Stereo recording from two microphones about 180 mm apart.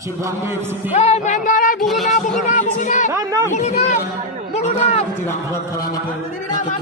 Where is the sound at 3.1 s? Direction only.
15° right (ahead or behind).